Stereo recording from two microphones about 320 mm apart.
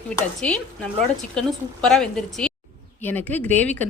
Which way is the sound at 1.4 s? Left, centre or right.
Centre.